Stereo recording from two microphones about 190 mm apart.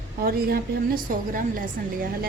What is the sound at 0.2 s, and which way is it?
A woman's voice, 55° right (ahead or behind).